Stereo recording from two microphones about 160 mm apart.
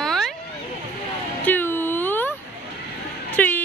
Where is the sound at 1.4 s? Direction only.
10° left (ahead or behind).